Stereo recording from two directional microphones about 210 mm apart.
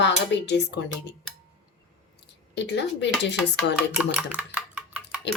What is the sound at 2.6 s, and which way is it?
Speech, 55° left (ahead or behind).